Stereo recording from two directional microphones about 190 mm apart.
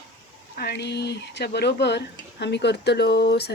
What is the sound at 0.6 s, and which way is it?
Speech, 60° left (ahead or behind).